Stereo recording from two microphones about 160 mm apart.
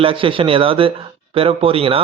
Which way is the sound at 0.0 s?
35° right (ahead or behind).